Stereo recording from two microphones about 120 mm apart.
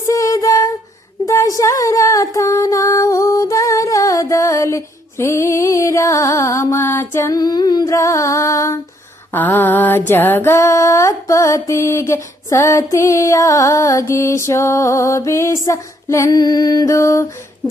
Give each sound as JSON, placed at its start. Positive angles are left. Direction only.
{"t": 0.1, "sound": "a sound", "side_deg": 30}
{"t": 1.2, "sound": "music", "side_deg": 25}
{"t": 9.3, "sound": "mantra", "side_deg": 15}
{"t": 10.1, "sound": "music", "side_deg": 15}